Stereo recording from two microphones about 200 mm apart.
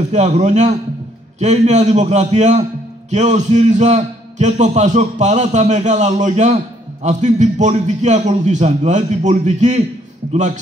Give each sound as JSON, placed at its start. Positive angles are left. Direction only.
{"t": 0.1, "sound": "a man's voice", "side_deg": -35}